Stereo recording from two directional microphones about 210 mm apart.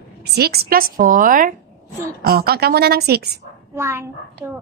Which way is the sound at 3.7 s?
10° right (ahead or behind).